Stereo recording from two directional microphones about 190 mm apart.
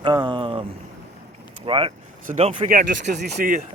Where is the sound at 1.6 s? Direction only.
25° right (ahead or behind); by 3.1 s 45° right (ahead or behind).